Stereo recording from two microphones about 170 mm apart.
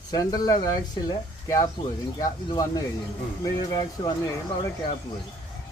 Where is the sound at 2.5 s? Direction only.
20° left (ahead or behind).